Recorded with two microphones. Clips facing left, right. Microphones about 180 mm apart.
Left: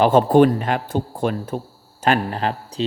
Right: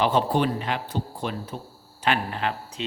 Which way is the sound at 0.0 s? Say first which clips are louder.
Left 9 dB; 50° left (ahead or behind).